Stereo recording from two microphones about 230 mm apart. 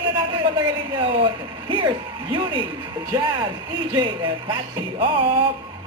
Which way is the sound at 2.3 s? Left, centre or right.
Right.